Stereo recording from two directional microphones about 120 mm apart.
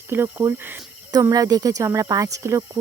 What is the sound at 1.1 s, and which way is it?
Cricket, 30° right (ahead or behind).